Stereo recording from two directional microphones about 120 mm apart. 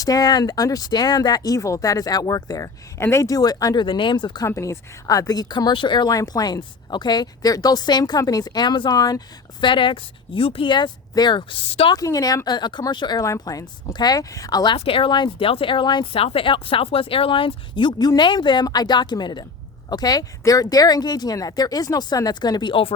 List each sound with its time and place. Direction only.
0.0 s speech: 30° left (ahead or behind)
3.8 s speech: 45° left (ahead or behind)
4.4 s speech: 25° left (ahead or behind); by 11.9 s 50° left (ahead or behind)
11.9 s speech: 30° left (ahead or behind)
14.8 s speech: 50° left (ahead or behind)